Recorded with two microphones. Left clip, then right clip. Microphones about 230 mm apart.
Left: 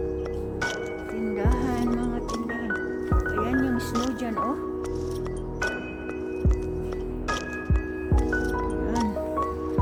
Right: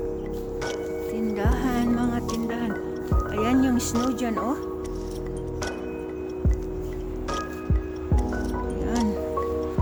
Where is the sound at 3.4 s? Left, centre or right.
Right.